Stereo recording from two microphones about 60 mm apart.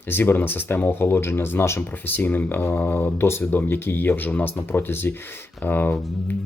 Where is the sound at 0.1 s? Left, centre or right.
Left.